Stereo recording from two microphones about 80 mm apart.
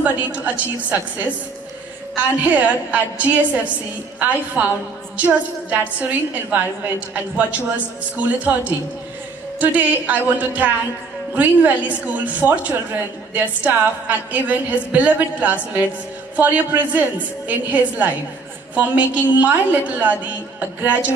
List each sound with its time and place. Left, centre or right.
0.0 s a woman's voice: centre